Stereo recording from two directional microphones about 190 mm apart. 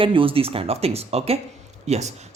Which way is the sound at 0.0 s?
25° right (ahead or behind).